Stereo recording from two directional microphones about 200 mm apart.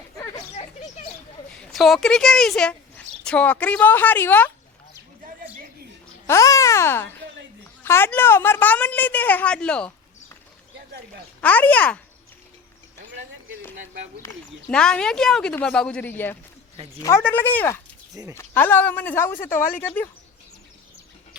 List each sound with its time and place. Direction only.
1.7 s speech: centre (ahead or behind)
6.2 s a woman's voice: 15° left (ahead or behind)
11.3 s speech: 10° left (ahead or behind)
14.7 s a woman's voice: 5° left (ahead or behind)
18.1 s speech: 15° right (ahead or behind)
18.3 s a woman's voice: 10° left (ahead or behind)